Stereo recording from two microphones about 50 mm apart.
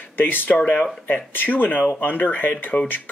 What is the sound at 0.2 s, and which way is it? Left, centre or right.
Speech, left.